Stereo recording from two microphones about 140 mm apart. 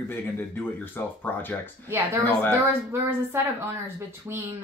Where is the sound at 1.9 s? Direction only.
15° right (ahead or behind).